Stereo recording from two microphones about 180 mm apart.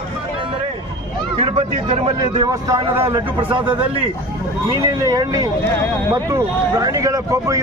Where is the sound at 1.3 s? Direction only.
30° right (ahead or behind).